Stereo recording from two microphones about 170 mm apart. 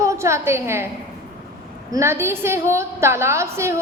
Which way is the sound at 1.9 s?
15° right (ahead or behind).